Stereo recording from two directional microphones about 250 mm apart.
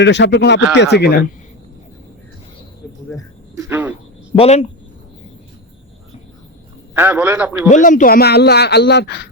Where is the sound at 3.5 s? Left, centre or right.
Centre.